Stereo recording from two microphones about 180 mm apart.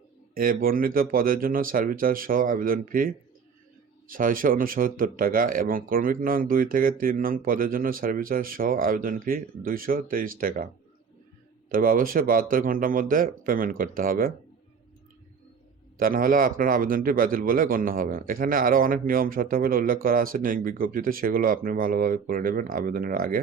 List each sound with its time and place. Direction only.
0.3 s a man's voice: 55° right (ahead or behind)
11.7 s a man's voice: 50° right (ahead or behind)
16.0 s a man's voice: 50° right (ahead or behind)